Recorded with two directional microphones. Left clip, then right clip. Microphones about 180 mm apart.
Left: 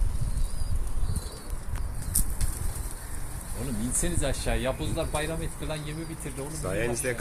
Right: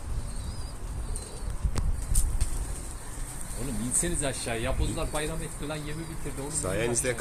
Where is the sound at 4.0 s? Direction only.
60° left (ahead or behind).